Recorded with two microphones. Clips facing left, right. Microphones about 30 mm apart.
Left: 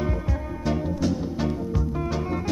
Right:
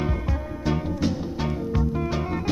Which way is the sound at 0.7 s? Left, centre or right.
Right.